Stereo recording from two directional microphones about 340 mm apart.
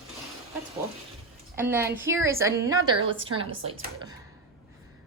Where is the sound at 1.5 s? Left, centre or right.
Centre.